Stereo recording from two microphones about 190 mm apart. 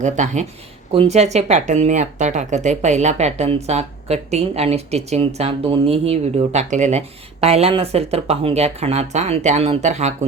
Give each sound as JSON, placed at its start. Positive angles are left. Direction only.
{"t": 0.0, "sound": "speech", "side_deg": -40}